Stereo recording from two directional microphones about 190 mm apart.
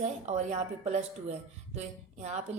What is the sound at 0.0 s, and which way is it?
Speech, 35° right (ahead or behind).